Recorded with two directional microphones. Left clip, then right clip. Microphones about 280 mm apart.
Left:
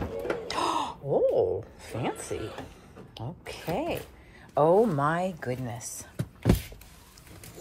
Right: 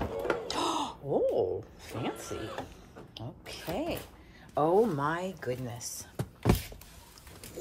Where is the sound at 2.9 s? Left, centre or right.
Right.